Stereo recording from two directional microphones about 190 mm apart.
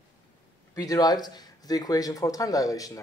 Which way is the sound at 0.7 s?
20° left (ahead or behind).